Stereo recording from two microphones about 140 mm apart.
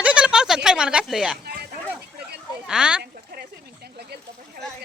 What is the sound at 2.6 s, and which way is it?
Speech, 5° right (ahead or behind).